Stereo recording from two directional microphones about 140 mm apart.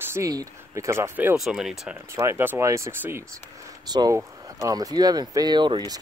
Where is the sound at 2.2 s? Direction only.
20° right (ahead or behind).